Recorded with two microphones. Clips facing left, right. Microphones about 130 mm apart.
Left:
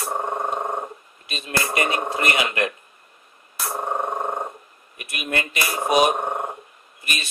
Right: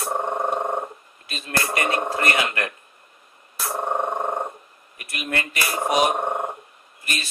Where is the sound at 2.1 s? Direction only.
20° left (ahead or behind).